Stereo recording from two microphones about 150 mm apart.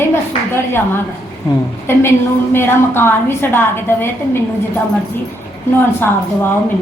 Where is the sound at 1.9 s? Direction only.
15° left (ahead or behind).